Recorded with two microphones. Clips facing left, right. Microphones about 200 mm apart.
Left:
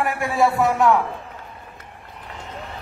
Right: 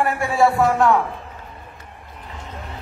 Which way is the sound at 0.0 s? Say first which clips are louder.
Right 2 dB; centre (ahead or behind).